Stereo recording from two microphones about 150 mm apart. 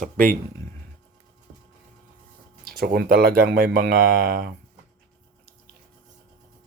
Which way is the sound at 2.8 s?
85° right.